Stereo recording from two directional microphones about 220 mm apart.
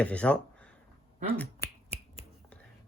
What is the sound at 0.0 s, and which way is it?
Speech, 5° left (ahead or behind).